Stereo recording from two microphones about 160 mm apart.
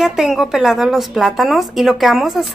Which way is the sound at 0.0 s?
5° right (ahead or behind).